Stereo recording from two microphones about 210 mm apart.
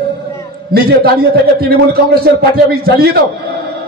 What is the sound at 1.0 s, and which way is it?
Speech, 45° right (ahead or behind).